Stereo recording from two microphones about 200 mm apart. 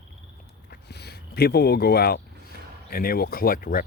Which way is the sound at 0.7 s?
55° left (ahead or behind).